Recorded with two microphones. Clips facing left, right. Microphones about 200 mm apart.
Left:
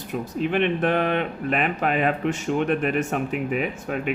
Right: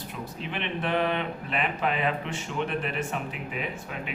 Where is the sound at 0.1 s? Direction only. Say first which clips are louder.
Left 13 dB; 50° left (ahead or behind).